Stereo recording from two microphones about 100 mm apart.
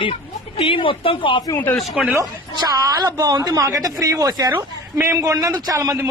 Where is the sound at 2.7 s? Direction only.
40° right (ahead or behind).